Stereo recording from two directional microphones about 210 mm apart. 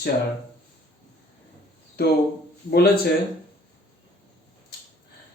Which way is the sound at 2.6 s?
45° left (ahead or behind).